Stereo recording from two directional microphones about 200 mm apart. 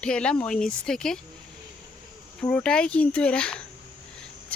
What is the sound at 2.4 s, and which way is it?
Speech, 5° left (ahead or behind).